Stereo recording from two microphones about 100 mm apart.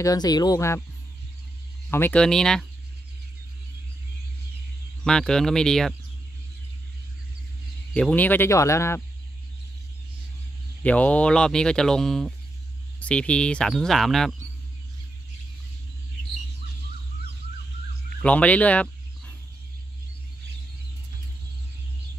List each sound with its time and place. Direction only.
0.0 s speech: 40° left (ahead or behind)
1.9 s speech: 20° left (ahead or behind)
2.1 s speech: 5° left (ahead or behind)
5.0 s speech: 5° left (ahead or behind)
7.9 s speech: 15° left (ahead or behind)
10.8 s speech: 15° left (ahead or behind)
18.2 s speech: 15° left (ahead or behind)